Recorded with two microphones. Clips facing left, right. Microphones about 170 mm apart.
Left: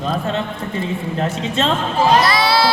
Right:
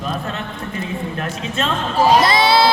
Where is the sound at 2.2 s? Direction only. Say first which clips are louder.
Right 2 dB; 25° right (ahead or behind).